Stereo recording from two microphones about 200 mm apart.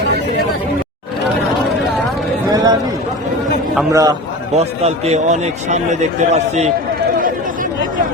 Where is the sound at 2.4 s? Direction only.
20° right (ahead or behind).